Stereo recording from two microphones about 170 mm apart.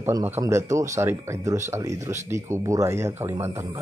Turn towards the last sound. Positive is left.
turn(degrees=-15)  # may be behind; listen again after turning